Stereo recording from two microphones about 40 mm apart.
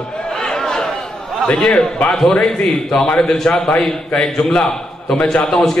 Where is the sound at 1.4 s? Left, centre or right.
Left.